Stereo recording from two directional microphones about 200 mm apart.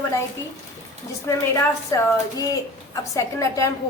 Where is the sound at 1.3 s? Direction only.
15° left (ahead or behind).